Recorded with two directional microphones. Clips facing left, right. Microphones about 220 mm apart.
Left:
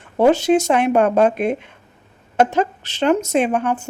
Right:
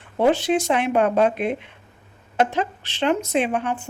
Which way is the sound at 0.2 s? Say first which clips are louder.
Left 5 dB; 45° left (ahead or behind).